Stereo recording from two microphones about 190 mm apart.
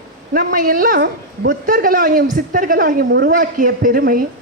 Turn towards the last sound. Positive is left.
turn(degrees=-50)  # may be behind; listen again after turning